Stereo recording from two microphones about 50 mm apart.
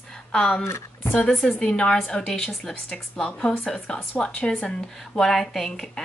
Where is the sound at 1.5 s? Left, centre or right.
Left.